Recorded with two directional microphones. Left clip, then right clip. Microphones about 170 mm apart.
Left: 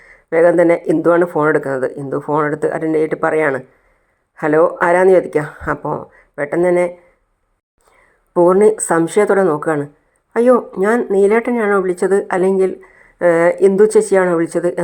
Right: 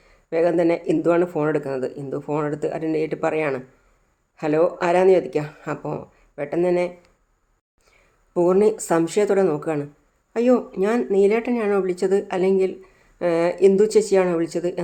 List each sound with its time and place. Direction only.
0.3 s speech: 20° left (ahead or behind)
8.3 s a woman's voice: 20° left (ahead or behind)